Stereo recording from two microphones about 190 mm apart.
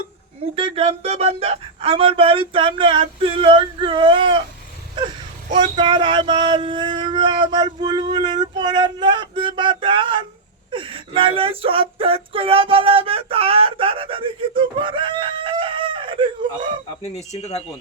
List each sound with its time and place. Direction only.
0.5 s speech: 30° right (ahead or behind)
4.9 s a sound: 25° right (ahead or behind)
5.7 s speech: 25° right (ahead or behind)
17.3 s speech: 35° left (ahead or behind)